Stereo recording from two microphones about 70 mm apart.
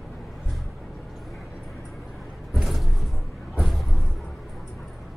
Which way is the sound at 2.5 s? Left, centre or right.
Centre.